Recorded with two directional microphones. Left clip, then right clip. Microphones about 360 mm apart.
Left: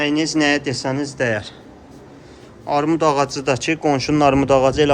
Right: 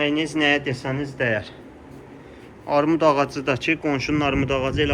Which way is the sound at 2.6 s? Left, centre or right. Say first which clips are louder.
Left 1 dB; centre.